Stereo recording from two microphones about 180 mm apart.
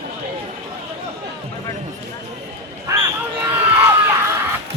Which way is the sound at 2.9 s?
20° right (ahead or behind).